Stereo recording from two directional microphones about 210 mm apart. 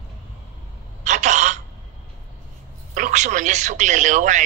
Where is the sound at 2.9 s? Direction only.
35° right (ahead or behind).